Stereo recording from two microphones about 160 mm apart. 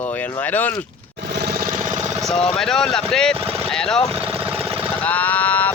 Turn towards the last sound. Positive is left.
turn(degrees=10)  # may be behind; listen again after turning